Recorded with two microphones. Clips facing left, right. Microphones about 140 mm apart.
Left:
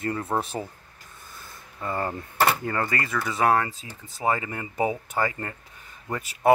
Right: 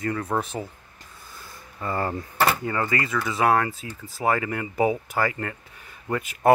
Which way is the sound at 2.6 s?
40° left (ahead or behind).